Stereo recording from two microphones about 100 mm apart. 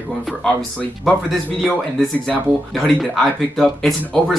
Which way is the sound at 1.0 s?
Centre (ahead or behind).